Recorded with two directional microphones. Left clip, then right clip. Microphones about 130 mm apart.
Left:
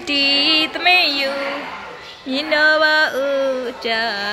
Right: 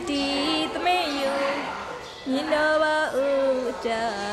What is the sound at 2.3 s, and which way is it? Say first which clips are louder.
Speech: left 7 dB; 25° left (ahead or behind).